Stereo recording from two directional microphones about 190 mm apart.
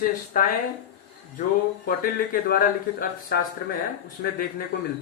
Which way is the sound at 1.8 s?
50° left (ahead or behind).